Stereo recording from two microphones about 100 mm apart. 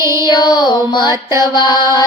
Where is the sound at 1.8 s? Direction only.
45° left (ahead or behind).